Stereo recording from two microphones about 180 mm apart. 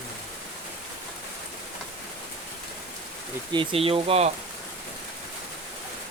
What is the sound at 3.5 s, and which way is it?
Speech, 30° right (ahead or behind).